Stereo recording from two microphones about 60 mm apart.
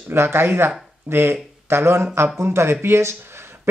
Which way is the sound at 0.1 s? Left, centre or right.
Right.